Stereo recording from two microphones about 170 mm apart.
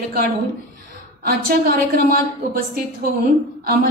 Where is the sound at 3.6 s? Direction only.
65° right (ahead or behind).